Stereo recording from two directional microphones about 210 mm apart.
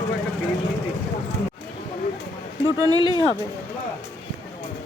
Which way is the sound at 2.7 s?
20° right (ahead or behind).